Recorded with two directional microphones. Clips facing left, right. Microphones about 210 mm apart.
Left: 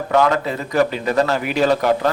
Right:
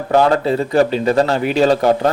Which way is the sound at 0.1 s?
30° right (ahead or behind).